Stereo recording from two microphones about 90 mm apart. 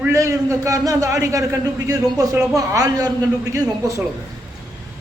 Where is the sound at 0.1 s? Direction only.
35° right (ahead or behind).